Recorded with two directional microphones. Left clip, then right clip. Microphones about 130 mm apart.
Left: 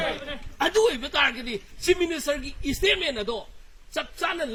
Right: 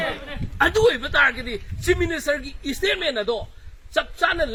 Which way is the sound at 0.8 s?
25° left (ahead or behind).